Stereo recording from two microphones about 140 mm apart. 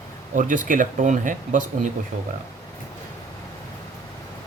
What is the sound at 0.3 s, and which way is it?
Speech, 70° right (ahead or behind).